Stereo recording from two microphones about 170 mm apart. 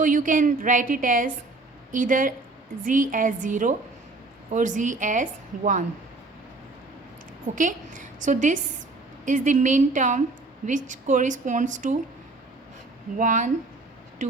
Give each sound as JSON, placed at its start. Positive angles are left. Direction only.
{"t": 0.0, "sound": "a woman's voice", "side_deg": -50}
{"t": 7.5, "sound": "a woman's voice", "side_deg": -50}
{"t": 13.1, "sound": "a woman's voice", "side_deg": -45}